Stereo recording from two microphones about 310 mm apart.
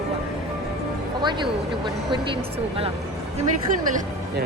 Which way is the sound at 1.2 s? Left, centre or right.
Centre.